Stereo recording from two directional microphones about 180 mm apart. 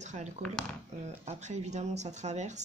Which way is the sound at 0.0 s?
40° right (ahead or behind).